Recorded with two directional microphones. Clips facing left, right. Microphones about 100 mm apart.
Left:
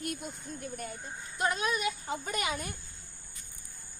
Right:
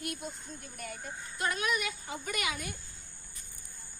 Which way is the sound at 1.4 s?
25° left (ahead or behind).